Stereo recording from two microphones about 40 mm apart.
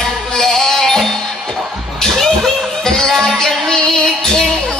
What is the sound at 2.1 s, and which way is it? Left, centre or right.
Music, centre.